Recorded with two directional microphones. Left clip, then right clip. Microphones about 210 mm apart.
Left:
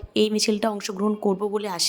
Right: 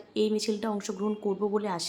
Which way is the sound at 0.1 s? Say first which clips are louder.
Left 6 dB; 35° left (ahead or behind).